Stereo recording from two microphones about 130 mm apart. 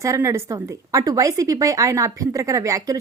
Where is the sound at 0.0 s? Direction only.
25° right (ahead or behind).